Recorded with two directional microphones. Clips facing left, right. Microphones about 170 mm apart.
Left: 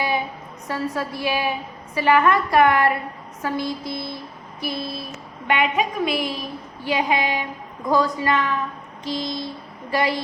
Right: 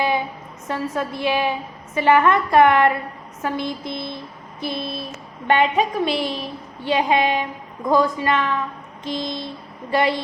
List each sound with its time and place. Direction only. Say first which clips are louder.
0.7 s a woman's voice: right 1 dB; 20° right (ahead or behind)